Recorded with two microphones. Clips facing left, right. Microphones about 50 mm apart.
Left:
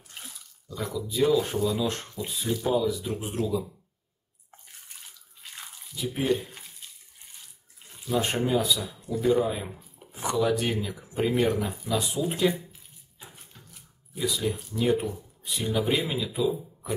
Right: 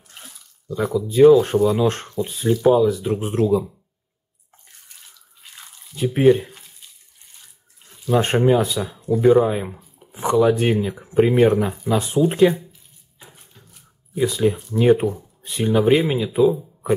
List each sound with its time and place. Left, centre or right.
0.7 s speech: right
5.4 s drip: centre
5.9 s speech: right
8.1 s speech: right
10.1 s speech: right
12.3 s speech: right
14.1 s speech: right